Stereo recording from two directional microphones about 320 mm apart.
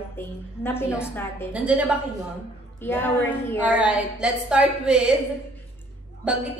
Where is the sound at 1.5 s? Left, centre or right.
Centre.